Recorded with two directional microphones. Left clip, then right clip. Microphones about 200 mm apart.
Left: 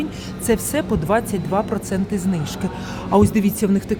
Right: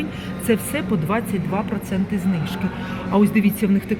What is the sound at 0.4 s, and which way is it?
Speech, 20° left (ahead or behind).